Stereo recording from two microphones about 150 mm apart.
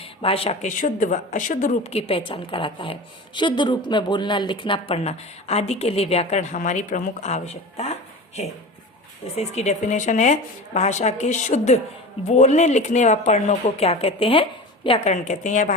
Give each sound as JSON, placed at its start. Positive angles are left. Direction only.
{"t": 0.0, "sound": "speech", "side_deg": 40}
{"t": 0.8, "sound": "a woman's voice", "side_deg": 55}
{"t": 9.3, "sound": "a woman's voice", "side_deg": 45}
{"t": 15.1, "sound": "a woman's voice", "side_deg": 55}